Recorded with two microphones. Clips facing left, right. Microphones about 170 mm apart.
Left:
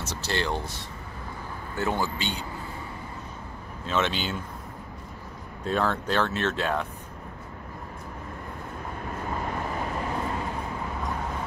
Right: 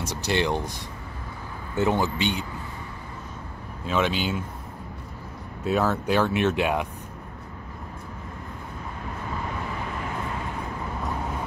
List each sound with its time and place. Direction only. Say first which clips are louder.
0.0 s speech: right 4 dB; 15° right (ahead or behind)
1.8 s speech: right 5 dB; 20° right (ahead or behind)
3.8 s speech: right 3 dB; 10° right (ahead or behind)
5.6 s speech: right 3 dB; 5° right (ahead or behind)